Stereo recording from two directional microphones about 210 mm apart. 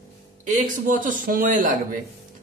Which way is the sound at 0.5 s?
40° right (ahead or behind).